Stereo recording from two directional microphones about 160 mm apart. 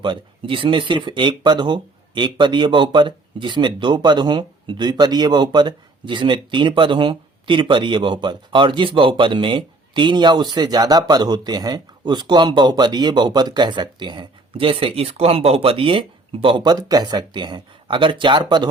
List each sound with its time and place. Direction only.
0.0 s speech: 30° right (ahead or behind)